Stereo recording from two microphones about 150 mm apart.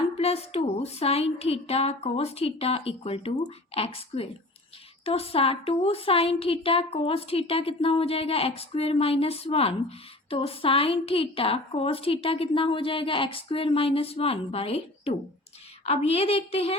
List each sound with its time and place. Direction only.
0.2 s a woman's voice: 40° left (ahead or behind)